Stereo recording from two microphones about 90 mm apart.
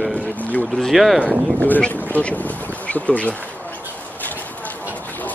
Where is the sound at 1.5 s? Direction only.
15° left (ahead or behind).